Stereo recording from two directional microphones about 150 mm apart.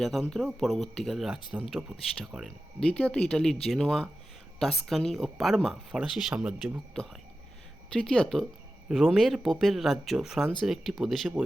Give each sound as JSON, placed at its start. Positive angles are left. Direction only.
{"t": 0.0, "sound": "speech", "side_deg": 0}